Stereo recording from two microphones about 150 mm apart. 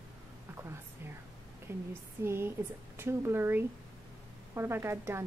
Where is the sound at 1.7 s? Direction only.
15° right (ahead or behind).